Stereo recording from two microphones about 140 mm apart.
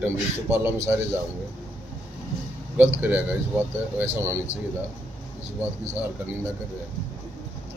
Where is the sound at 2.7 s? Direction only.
15° right (ahead or behind).